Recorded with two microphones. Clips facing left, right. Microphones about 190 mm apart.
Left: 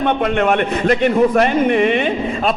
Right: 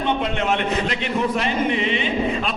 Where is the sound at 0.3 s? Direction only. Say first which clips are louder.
Left 5 dB; 55° left (ahead or behind).